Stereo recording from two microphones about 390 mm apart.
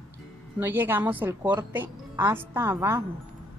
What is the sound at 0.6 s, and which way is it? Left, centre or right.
A woman's voice, centre.